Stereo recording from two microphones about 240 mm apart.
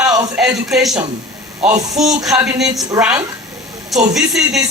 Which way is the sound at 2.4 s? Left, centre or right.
Centre.